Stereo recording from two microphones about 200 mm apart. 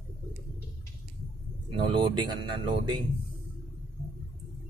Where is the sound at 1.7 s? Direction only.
25° right (ahead or behind).